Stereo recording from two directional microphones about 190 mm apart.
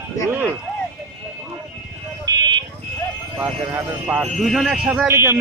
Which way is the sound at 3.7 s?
10° right (ahead or behind).